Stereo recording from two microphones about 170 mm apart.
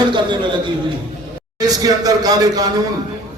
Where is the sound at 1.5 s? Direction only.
20° right (ahead or behind).